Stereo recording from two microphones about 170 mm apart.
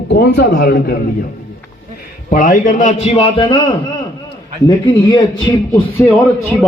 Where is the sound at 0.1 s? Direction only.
80° left.